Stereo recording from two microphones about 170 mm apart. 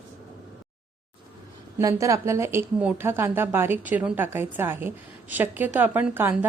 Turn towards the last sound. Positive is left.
turn(degrees=-10)  # may be behind; listen again after turning